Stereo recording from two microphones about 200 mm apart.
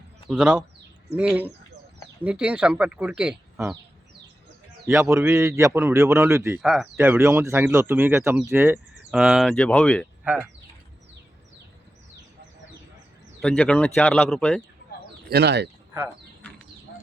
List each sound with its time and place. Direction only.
0.3 s a man's voice: 5° right (ahead or behind)
4.9 s a man's voice: 15° right (ahead or behind)
6.6 s speech: centre (ahead or behind)
6.9 s a man's voice: 10° right (ahead or behind); by 10.1 s 5° left (ahead or behind)
13.4 s speech: 5° left (ahead or behind)
15.3 s speech: 55° right (ahead or behind)
16.4 s a sound: 10° left (ahead or behind)